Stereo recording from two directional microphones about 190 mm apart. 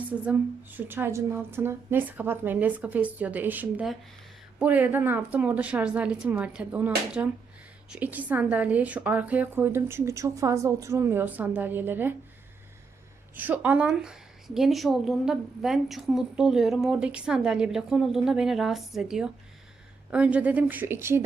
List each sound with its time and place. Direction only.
0.0 s a woman's voice: 10° right (ahead or behind)
13.3 s a woman's voice: 10° right (ahead or behind)